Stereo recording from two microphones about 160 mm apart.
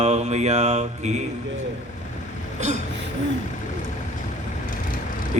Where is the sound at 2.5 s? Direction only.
45° right (ahead or behind).